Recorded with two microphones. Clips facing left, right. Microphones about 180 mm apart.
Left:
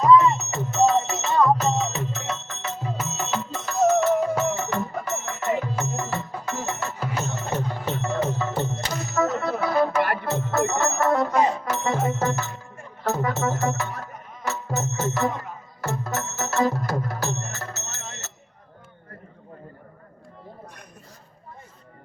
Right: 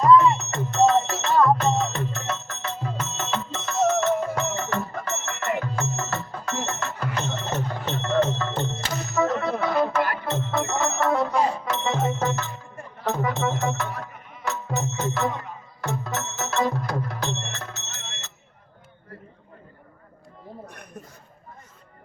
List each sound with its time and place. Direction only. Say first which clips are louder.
0.0 s music: even; centre (ahead or behind)
17.8 s music: left 3 dB; 40° left (ahead or behind)